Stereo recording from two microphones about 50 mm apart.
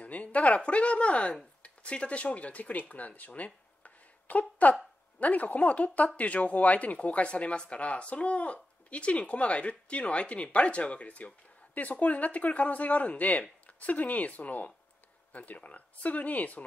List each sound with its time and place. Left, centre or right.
0.0 s speech: left